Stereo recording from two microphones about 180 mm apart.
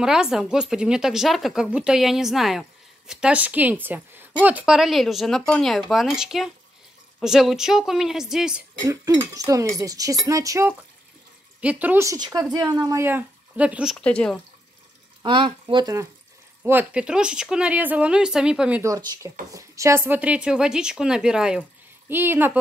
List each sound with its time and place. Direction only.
0.0 s speech: 5° right (ahead or behind)
8.8 s speech: 20° right (ahead or behind)
13.9 s speech: 5° left (ahead or behind)
15.2 s speech: 25° right (ahead or behind)
16.6 s speech: 10° right (ahead or behind)